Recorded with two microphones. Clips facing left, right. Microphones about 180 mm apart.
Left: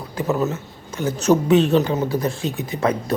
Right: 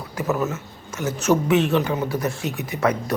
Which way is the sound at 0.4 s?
35° left (ahead or behind).